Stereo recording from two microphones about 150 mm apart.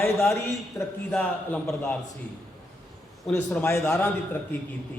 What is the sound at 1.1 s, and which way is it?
Speech, 10° left (ahead or behind).